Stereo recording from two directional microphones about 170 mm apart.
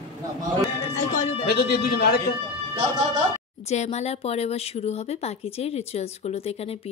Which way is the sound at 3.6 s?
40° left (ahead or behind).